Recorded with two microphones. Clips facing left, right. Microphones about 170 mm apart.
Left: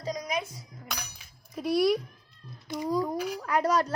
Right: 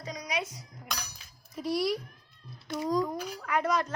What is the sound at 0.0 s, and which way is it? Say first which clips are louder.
Music: left 3 dB; 40° left (ahead or behind).